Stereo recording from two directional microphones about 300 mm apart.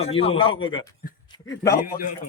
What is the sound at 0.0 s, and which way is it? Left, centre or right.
A man's voice, centre.